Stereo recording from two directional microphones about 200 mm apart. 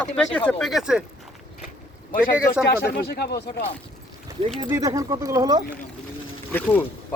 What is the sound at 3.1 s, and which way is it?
Speech, 50° left (ahead or behind).